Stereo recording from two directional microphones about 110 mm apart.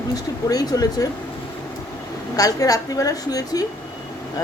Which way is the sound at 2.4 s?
35° left (ahead or behind).